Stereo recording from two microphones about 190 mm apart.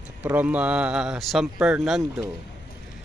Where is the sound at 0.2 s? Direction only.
10° right (ahead or behind).